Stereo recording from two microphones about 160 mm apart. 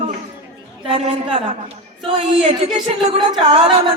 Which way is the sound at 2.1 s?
35° right (ahead or behind).